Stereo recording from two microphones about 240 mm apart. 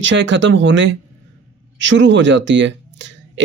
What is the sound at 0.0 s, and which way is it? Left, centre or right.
Speech, right.